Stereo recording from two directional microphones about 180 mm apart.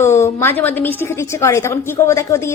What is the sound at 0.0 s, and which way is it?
A woman's voice, 15° left (ahead or behind).